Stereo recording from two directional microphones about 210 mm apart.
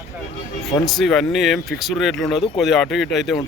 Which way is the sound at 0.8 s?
Centre (ahead or behind).